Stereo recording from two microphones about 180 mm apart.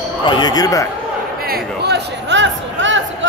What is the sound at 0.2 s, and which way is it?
Speech, 25° left (ahead or behind).